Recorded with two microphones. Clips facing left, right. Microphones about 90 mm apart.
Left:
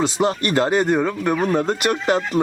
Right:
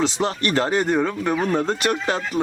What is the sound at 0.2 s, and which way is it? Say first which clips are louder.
Speech: left 3 dB; 15° left (ahead or behind).